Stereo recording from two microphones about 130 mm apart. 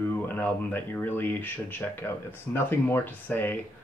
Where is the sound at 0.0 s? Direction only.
15° left (ahead or behind).